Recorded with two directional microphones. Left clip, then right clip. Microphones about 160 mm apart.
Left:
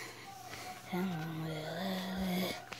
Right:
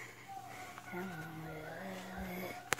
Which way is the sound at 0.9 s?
50° left (ahead or behind).